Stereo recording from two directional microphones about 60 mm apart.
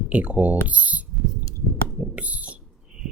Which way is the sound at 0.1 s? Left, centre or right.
Right.